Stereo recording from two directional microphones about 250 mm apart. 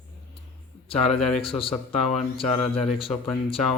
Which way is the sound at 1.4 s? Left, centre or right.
Left.